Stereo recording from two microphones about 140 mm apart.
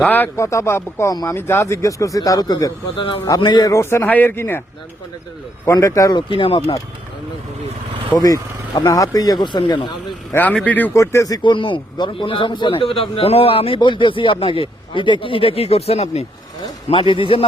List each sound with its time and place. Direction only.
0.0 s a man's voice: 10° left (ahead or behind)
5.6 s a man's voice: 20° left (ahead or behind); by 6.7 s 40° left (ahead or behind)
8.1 s speech: 30° left (ahead or behind)
10.3 s a man's voice: 10° left (ahead or behind)
10.9 s speech: 20° left (ahead or behind)
11.4 s a man's voice: 35° left (ahead or behind)